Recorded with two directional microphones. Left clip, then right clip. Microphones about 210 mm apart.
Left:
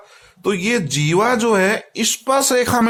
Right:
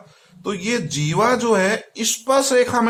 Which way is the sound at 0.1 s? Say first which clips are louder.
Left 6 dB; 40° left (ahead or behind).